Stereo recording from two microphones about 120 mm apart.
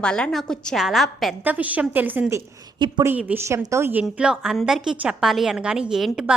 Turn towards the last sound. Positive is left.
turn(degrees=-5)  # may be behind; listen again after turning